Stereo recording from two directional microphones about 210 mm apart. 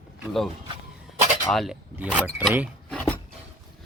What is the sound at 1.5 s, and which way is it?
Speech, centre (ahead or behind).